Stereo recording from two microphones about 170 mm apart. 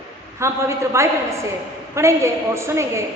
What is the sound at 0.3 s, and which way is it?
A woman's voice, 15° right (ahead or behind).